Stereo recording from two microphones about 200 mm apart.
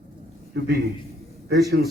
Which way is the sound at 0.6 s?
55° right (ahead or behind).